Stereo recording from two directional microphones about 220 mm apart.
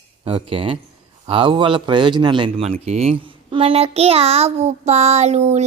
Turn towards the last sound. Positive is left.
turn(degrees=-30)  # may be behind; listen again after turning